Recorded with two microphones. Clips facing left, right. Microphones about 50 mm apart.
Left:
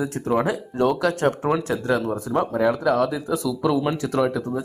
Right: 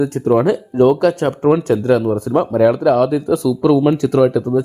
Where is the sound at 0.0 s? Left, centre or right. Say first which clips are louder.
Right 8 dB; centre.